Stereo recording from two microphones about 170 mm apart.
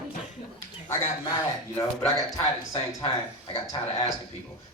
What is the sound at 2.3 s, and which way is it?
Speech, 20° left (ahead or behind).